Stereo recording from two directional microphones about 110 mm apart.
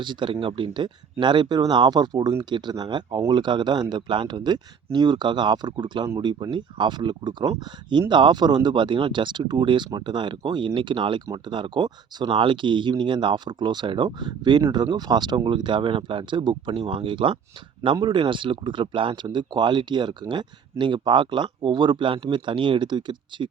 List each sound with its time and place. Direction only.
0.0 s speech: 45° right (ahead or behind)